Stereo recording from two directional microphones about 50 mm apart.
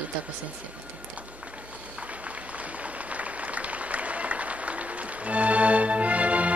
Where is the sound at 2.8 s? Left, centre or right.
Right.